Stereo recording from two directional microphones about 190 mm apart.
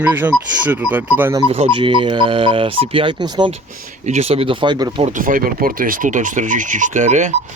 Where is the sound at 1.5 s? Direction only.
30° right (ahead or behind).